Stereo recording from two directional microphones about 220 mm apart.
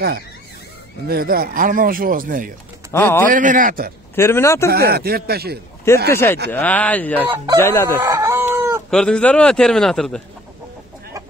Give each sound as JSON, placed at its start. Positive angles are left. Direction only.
{"t": 1.0, "sound": "speech", "side_deg": -45}
{"t": 2.9, "sound": "speech", "side_deg": 10}
{"t": 3.3, "sound": "speech", "side_deg": -35}
{"t": 4.1, "sound": "speech", "side_deg": 10}
{"t": 4.6, "sound": "speech", "side_deg": -45}
{"t": 6.0, "sound": "speech", "side_deg": 10}
{"t": 7.2, "sound": "speech", "side_deg": -20}
{"t": 7.6, "sound": "speech", "side_deg": 15}
{"t": 8.0, "sound": "chicken", "side_deg": -15}
{"t": 8.9, "sound": "a man's voice", "side_deg": 5}